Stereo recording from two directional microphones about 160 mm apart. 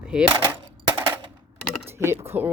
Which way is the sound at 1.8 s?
15° right (ahead or behind).